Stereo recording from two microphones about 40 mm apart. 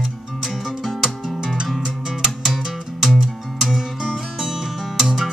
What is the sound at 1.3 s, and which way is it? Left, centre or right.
Music, centre.